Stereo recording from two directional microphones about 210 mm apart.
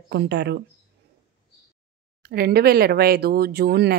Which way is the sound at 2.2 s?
50° right (ahead or behind).